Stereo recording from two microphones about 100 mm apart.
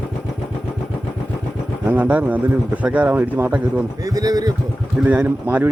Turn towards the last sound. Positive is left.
turn(degrees=-20)  # may be behind; listen again after turning